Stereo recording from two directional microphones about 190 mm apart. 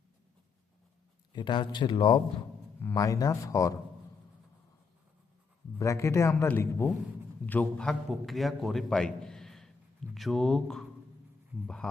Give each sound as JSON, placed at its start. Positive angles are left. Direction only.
{"t": 1.3, "sound": "speech", "side_deg": 25}
{"t": 5.8, "sound": "a man's voice", "side_deg": 15}